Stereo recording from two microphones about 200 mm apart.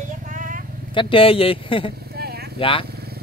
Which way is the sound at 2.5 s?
25° left (ahead or behind).